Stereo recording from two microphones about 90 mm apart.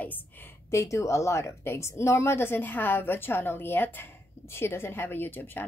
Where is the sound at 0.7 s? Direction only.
35° left (ahead or behind).